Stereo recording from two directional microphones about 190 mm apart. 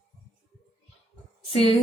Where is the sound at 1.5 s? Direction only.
30° left (ahead or behind).